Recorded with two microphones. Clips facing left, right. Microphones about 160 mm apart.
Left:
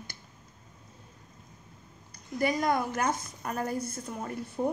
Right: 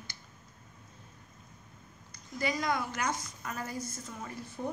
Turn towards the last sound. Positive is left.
turn(degrees=50)  # may be behind; listen again after turning